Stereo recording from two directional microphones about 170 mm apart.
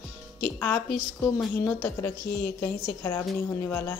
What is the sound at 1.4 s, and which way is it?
Speech, 5° left (ahead or behind).